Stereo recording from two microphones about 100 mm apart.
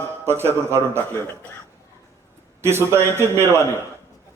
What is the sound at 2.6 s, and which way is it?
A man's voice, 25° right (ahead or behind).